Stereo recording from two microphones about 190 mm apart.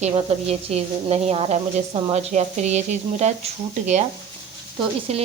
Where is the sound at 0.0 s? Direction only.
35° right (ahead or behind).